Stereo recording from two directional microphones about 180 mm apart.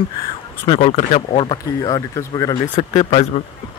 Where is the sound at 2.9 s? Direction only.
35° left (ahead or behind).